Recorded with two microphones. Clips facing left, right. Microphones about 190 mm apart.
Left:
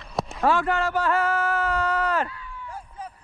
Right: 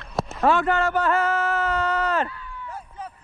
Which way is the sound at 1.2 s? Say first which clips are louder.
Right 1 dB; 25° right (ahead or behind).